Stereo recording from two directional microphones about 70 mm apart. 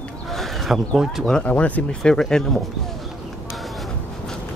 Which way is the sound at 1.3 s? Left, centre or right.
Centre.